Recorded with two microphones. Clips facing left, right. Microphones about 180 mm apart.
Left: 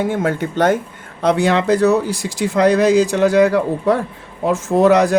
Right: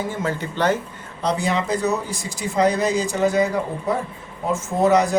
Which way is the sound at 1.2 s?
65° left (ahead or behind).